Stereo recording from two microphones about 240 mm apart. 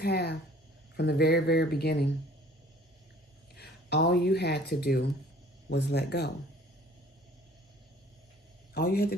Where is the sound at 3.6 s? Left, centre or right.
Left.